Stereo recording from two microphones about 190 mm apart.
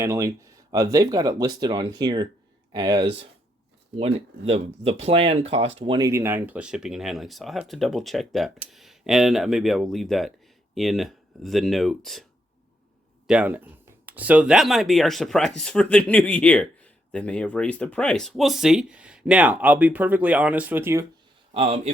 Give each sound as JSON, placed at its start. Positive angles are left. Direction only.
{"t": 0.0, "sound": "speech", "side_deg": -15}
{"t": 6.1, "sound": "speech", "side_deg": -15}
{"t": 13.2, "sound": "speech", "side_deg": -5}
{"t": 21.5, "sound": "speech", "side_deg": -30}